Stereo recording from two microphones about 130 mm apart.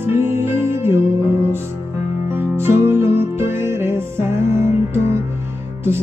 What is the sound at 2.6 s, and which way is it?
Music, 20° right (ahead or behind).